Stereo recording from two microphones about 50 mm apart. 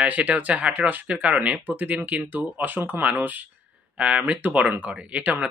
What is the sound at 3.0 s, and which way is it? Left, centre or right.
Speech, right.